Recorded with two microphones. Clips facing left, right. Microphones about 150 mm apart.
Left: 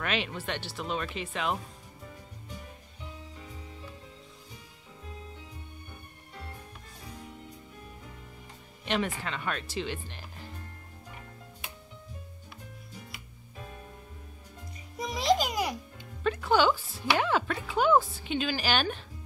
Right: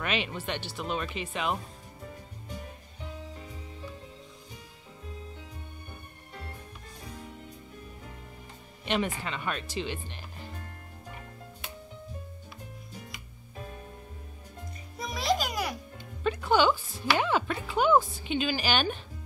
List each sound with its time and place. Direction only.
0.0 s a woman's voice: 5° right (ahead or behind)
8.8 s a woman's voice: 5° right (ahead or behind)
15.0 s music: 15° left (ahead or behind)
16.3 s a woman's voice: centre (ahead or behind)